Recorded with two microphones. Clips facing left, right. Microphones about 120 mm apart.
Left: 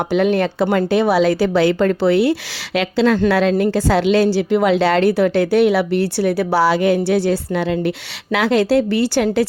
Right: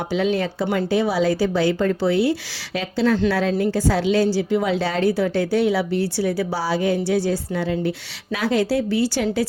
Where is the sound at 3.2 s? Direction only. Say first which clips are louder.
Left 5 dB; 70° left (ahead or behind).